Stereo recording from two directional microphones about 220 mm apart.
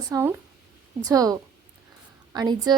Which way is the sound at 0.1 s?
10° right (ahead or behind).